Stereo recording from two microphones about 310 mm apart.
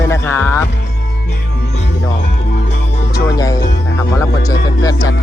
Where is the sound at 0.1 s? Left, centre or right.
Centre.